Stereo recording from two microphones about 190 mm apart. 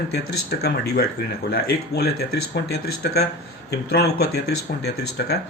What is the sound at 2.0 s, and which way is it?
Speech, 60° left (ahead or behind).